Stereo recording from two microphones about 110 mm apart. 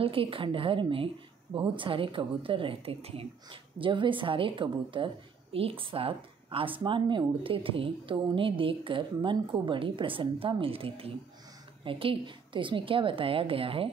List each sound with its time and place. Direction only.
0.0 s a woman's voice: 55° right (ahead or behind)